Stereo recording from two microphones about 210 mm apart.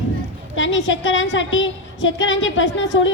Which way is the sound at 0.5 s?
65° left (ahead or behind).